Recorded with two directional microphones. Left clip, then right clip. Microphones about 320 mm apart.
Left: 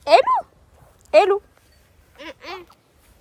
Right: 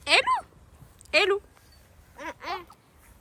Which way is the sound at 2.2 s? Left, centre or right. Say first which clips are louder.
Even; centre.